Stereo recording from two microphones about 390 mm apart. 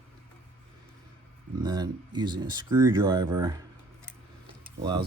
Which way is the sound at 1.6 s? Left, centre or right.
Centre.